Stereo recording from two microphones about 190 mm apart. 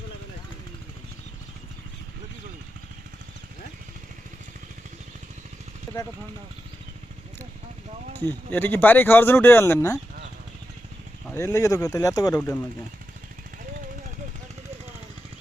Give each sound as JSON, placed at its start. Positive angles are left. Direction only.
{"t": 5.9, "sound": "vehicle", "side_deg": 15}
{"t": 8.3, "sound": "speech", "side_deg": 10}
{"t": 11.3, "sound": "speech", "side_deg": 15}